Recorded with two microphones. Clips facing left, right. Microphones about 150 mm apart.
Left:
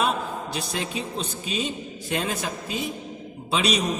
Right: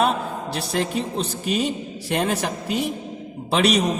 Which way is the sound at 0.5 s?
60° right (ahead or behind).